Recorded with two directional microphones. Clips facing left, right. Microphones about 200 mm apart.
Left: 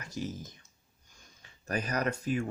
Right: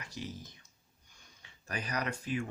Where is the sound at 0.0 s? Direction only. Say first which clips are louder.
Left 5 dB; 45° left (ahead or behind).